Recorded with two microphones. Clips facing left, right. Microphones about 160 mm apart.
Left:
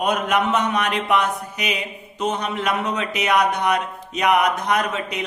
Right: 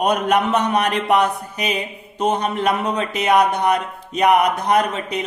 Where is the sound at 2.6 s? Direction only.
35° right (ahead or behind).